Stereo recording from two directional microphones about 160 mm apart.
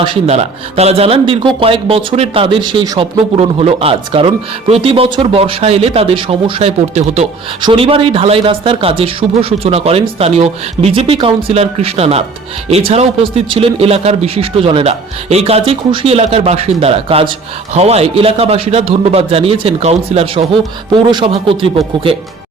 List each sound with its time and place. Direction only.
0.0 s a man's voice: 35° right (ahead or behind)
3.2 s a man's voice: 40° right (ahead or behind)